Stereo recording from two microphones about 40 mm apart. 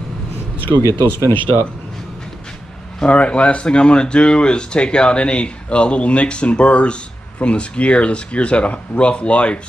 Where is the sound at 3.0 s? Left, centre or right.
Left.